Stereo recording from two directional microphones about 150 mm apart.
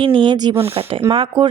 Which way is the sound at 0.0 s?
35° right (ahead or behind).